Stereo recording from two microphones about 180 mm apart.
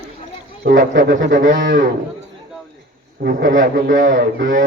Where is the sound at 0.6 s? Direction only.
50° right (ahead or behind).